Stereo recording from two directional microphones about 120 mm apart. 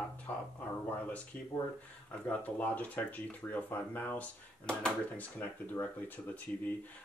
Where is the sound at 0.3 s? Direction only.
15° left (ahead or behind).